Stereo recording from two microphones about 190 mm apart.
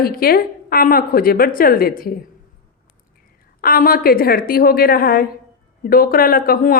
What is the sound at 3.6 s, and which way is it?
A woman's voice, 50° left (ahead or behind).